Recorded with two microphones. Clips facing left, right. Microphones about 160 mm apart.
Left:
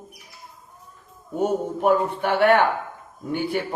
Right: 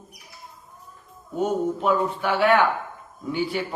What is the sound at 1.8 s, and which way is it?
Speech, 55° left (ahead or behind).